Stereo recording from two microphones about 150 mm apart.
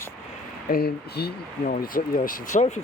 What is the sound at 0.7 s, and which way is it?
Speech, 90° left.